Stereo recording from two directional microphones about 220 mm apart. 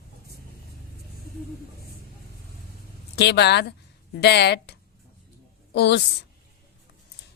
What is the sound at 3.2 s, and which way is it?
A woman's voice, 50° left (ahead or behind).